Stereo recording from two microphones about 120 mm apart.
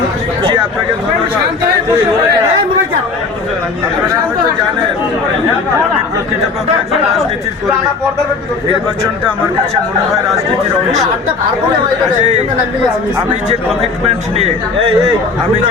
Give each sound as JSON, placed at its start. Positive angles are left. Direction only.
{"t": 12.2, "sound": "speech", "side_deg": -75}
{"t": 14.3, "sound": "speech", "side_deg": -60}